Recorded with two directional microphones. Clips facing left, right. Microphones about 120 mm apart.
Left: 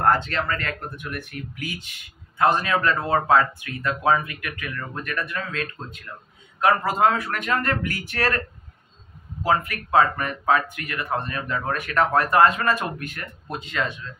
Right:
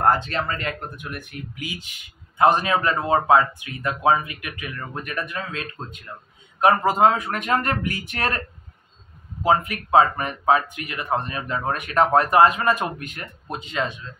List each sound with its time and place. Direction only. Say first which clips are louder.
0.0 s speech: right 1 dB; 20° right (ahead or behind)
9.4 s speech: right 2 dB; 20° right (ahead or behind)